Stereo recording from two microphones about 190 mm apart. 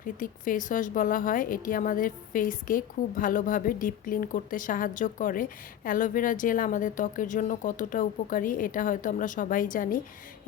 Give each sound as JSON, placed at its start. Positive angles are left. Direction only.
{"t": 0.2, "sound": "a woman's voice", "side_deg": 45}